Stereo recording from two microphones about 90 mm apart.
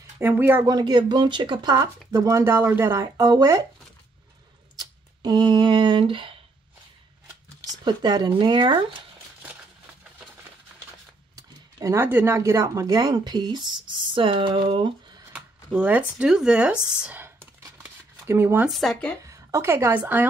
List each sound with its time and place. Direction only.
0.2 s speech: 25° right (ahead or behind)
0.7 s speech: 50° right (ahead or behind)
2.1 s speech: 35° right (ahead or behind)
3.3 s speech: 40° right (ahead or behind)
4.7 s speech: 50° right (ahead or behind); by 6.3 s 70° right (ahead or behind)
7.8 s speech: 50° right (ahead or behind)
11.3 s a sound: 40° right (ahead or behind)
12.0 s speech: 25° right (ahead or behind)
12.4 s speech: 35° right (ahead or behind); by 15.2 s 65° right (ahead or behind)
15.3 s speech: 15° right (ahead or behind)
17.2 s a sound: 25° right (ahead or behind)
18.7 s speech: centre (ahead or behind)
19.2 s a woman's voice: 35° right (ahead or behind)
20.0 s speech: 20° right (ahead or behind)